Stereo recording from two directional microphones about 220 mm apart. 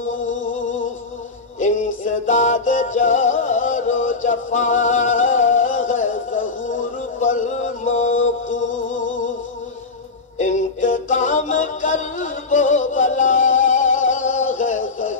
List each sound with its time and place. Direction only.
0.1 s a sound: 65° left (ahead or behind)
1.6 s music: 35° left (ahead or behind)
8.2 s music: 60° left (ahead or behind)
10.4 s music: 35° left (ahead or behind)